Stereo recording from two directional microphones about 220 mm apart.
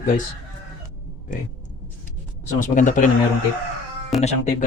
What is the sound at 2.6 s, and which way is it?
Speech, 35° left (ahead or behind).